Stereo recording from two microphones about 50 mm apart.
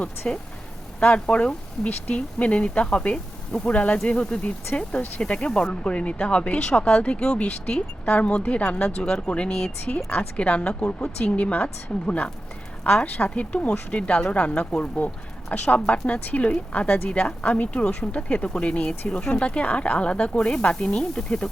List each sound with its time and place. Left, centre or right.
0.2 s speech: left
10.1 s speech: left